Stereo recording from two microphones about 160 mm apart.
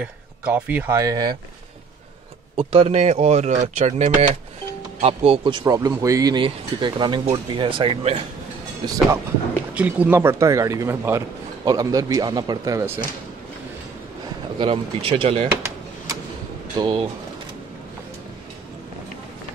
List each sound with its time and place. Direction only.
0.5 s speech: 10° right (ahead or behind)
2.5 s speech: 40° right (ahead or behind)
8.8 s speech: 20° right (ahead or behind)
9.8 s speech: 10° right (ahead or behind)
14.6 s speech: 35° right (ahead or behind)
15.5 s drawer open or close: 15° right (ahead or behind)
16.7 s speech: 30° right (ahead or behind)